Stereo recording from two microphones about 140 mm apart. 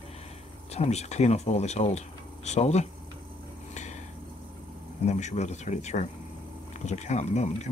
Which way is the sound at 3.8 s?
55° left (ahead or behind).